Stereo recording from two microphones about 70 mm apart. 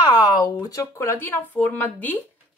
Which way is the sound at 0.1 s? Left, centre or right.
Left.